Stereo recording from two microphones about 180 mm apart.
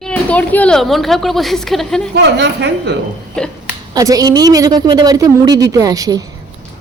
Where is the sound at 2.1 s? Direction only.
75° right (ahead or behind).